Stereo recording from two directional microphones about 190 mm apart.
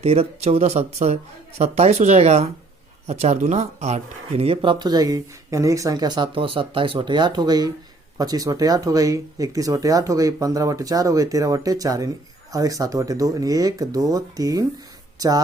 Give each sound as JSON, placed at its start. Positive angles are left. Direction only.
{"t": 0.0, "sound": "speech", "side_deg": -30}